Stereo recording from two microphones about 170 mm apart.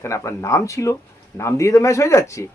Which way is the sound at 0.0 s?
15° left (ahead or behind).